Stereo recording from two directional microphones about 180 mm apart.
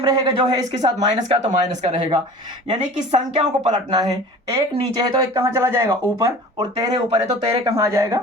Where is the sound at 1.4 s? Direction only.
40° right (ahead or behind).